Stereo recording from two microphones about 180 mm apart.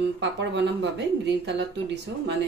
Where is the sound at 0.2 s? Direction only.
75° right (ahead or behind).